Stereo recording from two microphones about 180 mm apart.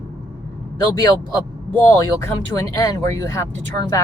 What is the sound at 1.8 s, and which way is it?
Speech, 15° left (ahead or behind).